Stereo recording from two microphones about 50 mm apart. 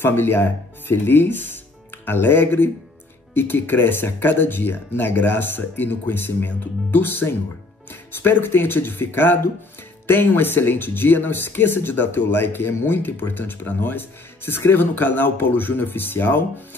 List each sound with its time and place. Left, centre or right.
0.0 s speech: left